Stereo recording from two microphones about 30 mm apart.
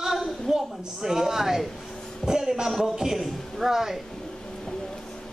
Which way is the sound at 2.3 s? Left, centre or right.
Right.